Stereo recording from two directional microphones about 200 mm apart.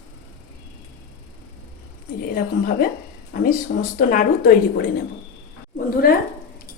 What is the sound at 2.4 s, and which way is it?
A woman's voice, 45° left (ahead or behind).